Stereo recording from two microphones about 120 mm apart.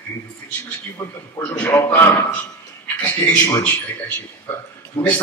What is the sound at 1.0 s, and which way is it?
Speech, 20° left (ahead or behind).